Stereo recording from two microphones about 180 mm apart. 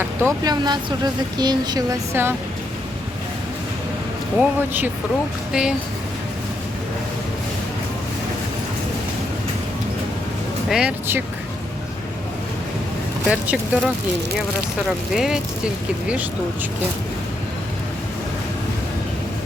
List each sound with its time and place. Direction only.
0.0 s speech: 15° right (ahead or behind)
4.4 s speech: 10° right (ahead or behind)
10.7 s speech: 5° right (ahead or behind)
13.2 s speech: 5° right (ahead or behind)